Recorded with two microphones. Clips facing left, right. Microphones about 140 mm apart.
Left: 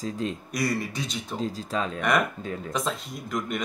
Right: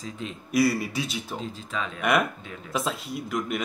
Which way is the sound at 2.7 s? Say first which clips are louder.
Right 4 dB; 5° right (ahead or behind).